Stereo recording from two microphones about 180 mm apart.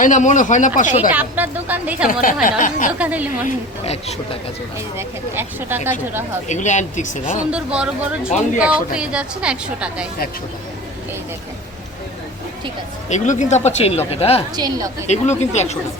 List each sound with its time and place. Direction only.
0.0 s speech: 45° left (ahead or behind)
1.1 s speech: 10° right (ahead or behind)
2.2 s speech: 50° left (ahead or behind)
3.0 s speech: 10° right (ahead or behind)
3.4 s speech: 35° left (ahead or behind)
4.9 s speech: 10° right (ahead or behind)
6.5 s speech: 40° left (ahead or behind)
7.5 s a woman's voice: 5° right (ahead or behind)
13.1 s speech: 40° left (ahead or behind)
14.5 s a woman's voice: 20° right (ahead or behind)
15.0 s speech: 40° left (ahead or behind)